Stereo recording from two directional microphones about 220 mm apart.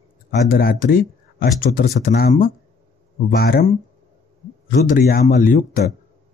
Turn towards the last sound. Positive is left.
turn(degrees=40)  # may be behind; listen again after turning